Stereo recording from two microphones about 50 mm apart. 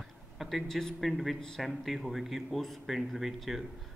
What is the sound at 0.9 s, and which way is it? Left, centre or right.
Speech, centre.